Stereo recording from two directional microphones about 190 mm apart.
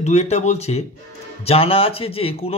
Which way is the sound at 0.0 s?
35° left (ahead or behind).